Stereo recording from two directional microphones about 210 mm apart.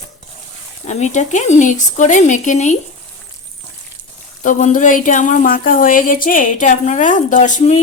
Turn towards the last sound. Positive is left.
turn(degrees=35)  # may be behind; listen again after turning